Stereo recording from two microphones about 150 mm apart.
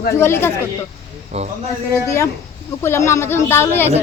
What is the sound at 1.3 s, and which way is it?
Speech, 45° right (ahead or behind).